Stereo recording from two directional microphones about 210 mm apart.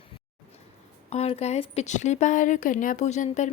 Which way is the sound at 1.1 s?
30° left (ahead or behind).